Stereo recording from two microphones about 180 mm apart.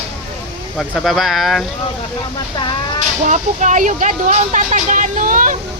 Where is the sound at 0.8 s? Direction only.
Centre (ahead or behind).